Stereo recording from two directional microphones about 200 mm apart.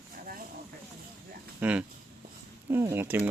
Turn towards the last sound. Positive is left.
turn(degrees=-10)  # may be behind; listen again after turning